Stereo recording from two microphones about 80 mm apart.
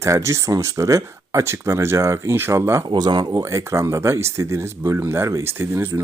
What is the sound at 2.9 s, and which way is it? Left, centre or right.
Speech, right.